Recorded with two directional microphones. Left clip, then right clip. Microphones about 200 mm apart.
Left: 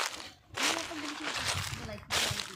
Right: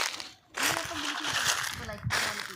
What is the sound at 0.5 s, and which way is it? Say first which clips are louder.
Splash: right 2 dB; 5° right (ahead or behind).